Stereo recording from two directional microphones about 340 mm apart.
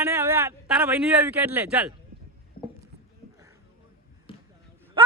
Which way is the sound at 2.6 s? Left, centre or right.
Left.